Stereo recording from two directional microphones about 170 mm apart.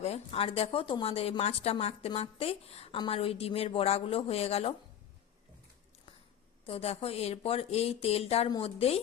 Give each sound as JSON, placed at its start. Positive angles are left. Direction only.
{"t": 0.0, "sound": "speech", "side_deg": 35}
{"t": 6.7, "sound": "speech", "side_deg": 35}